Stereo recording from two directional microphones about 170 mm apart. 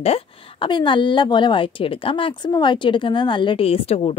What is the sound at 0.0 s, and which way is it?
A woman's voice, 35° left (ahead or behind).